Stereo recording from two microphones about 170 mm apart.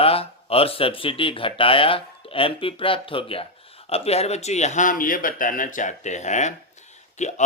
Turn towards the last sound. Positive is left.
turn(degrees=45)  # may be behind; listen again after turning